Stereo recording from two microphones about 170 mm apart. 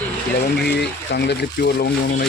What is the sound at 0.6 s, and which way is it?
Speech, 75° left (ahead or behind).